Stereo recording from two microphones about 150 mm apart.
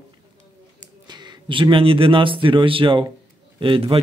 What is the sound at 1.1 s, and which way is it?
Speech, 30° right (ahead or behind).